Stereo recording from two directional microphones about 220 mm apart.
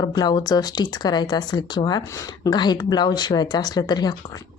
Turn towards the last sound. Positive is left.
turn(degrees=20)  # may be behind; listen again after turning